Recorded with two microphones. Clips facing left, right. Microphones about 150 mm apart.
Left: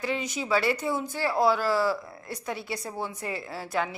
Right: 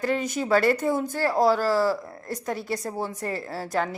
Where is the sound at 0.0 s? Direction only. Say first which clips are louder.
Right 5 dB; 50° right (ahead or behind).